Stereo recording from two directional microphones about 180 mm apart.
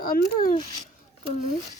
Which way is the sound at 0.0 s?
50° left (ahead or behind).